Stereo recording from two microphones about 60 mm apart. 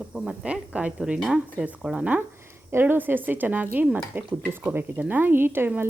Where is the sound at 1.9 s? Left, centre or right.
Right.